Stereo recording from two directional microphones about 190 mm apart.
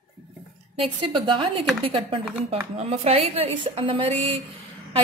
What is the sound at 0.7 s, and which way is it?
A woman's voice, 25° right (ahead or behind).